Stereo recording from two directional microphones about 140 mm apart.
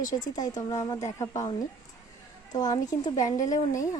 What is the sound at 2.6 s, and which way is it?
Speech, 30° left (ahead or behind).